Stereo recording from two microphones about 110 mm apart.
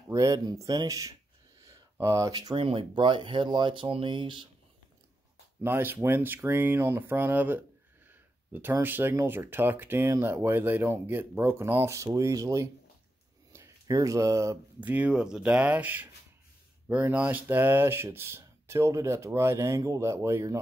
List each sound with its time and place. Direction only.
0.1 s speech: 30° right (ahead or behind)
1.7 s a sound: 30° right (ahead or behind)
2.5 s speech: 55° right (ahead or behind)
5.6 s speech: 20° right (ahead or behind)
14.9 s speech: 15° right (ahead or behind)